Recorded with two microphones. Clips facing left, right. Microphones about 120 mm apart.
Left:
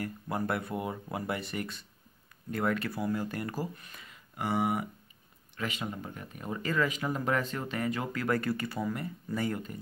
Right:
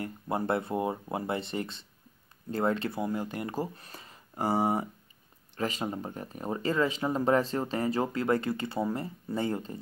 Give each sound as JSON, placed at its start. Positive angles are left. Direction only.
{"t": 0.0, "sound": "speech", "side_deg": -25}